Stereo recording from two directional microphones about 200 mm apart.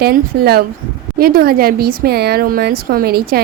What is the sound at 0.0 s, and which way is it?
A woman's voice, 50° right (ahead or behind).